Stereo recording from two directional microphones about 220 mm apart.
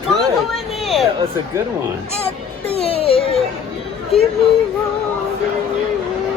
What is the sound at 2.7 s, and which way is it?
Music, 25° left (ahead or behind).